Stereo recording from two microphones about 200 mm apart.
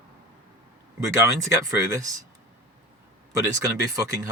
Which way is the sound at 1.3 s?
15° right (ahead or behind).